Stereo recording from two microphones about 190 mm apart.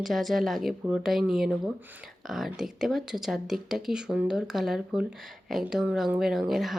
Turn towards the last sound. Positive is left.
turn(degrees=0)  # may be behind; listen again after turning